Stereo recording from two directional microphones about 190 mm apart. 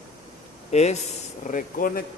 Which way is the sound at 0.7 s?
35° left (ahead or behind).